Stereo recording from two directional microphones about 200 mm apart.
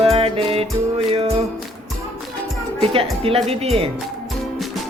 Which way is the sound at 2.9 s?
30° right (ahead or behind).